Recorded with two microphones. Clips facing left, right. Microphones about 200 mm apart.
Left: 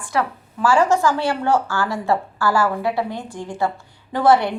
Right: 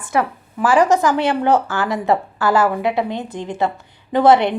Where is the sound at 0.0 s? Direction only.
20° right (ahead or behind).